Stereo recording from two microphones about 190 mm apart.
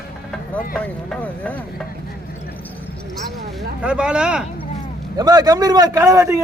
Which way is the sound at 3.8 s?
5° right (ahead or behind).